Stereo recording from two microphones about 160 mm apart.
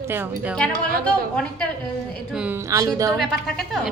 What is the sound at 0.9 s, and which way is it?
Speech, 65° right (ahead or behind).